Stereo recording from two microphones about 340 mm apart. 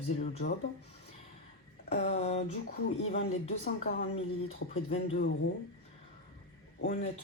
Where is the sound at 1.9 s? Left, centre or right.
Centre.